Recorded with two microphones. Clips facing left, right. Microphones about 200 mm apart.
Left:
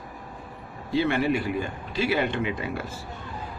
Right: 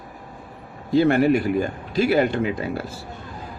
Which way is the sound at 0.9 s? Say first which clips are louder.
Right 7 dB; 45° right (ahead or behind).